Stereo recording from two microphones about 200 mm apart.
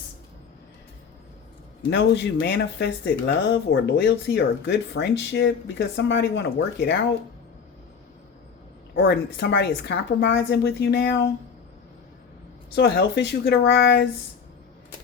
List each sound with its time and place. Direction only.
1.9 s speech: 60° left (ahead or behind)
9.0 s speech: 55° left (ahead or behind)
12.7 s speech: 60° left (ahead or behind)